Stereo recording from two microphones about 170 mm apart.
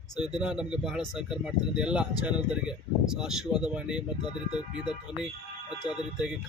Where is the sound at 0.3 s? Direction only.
5° right (ahead or behind).